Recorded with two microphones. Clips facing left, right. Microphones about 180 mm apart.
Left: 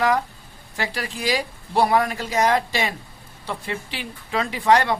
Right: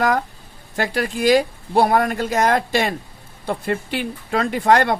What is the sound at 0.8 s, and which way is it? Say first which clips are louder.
Speech: right 7 dB; 50° right (ahead or behind).